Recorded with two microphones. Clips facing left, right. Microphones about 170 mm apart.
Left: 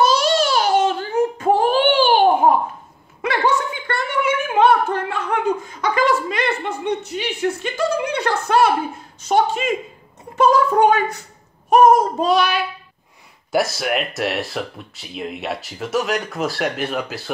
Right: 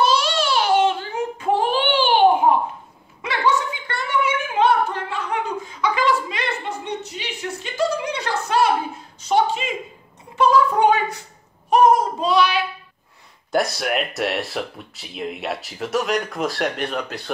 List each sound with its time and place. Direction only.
0.0 s a sound: 40° left (ahead or behind)
11.7 s child singing: 45° left (ahead or behind)
13.5 s speech: 5° left (ahead or behind)